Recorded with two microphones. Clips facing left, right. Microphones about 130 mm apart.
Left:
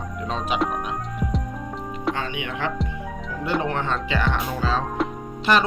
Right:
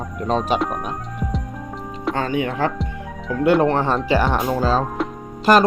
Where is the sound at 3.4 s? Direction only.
60° right (ahead or behind).